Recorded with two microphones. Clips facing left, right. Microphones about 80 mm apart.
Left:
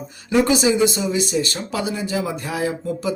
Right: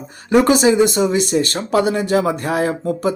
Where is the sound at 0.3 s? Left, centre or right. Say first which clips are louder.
Right 4 dB; right.